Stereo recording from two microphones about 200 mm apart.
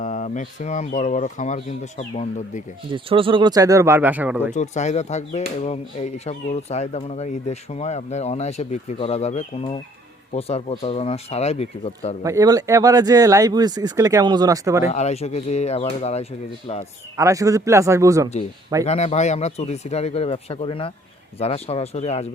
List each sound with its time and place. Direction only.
0.0 s speech: 40° left (ahead or behind)
2.9 s speech: 25° right (ahead or behind); by 4.5 s 10° right (ahead or behind)
4.5 s speech: 35° left (ahead or behind)
12.2 s speech: 15° right (ahead or behind)
14.8 s speech: 35° left (ahead or behind)
17.2 s speech: 15° right (ahead or behind)
18.9 s speech: 35° left (ahead or behind)